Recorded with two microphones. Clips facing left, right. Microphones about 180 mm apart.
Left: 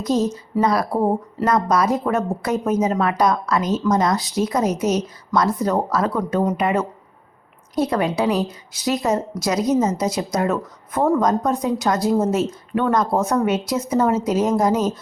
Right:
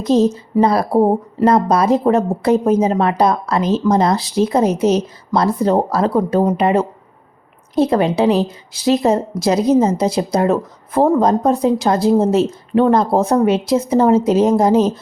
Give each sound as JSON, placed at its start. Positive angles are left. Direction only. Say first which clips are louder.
{"t": 0.0, "sound": "a woman's voice", "louder": "right 6 dB", "side_deg": -25}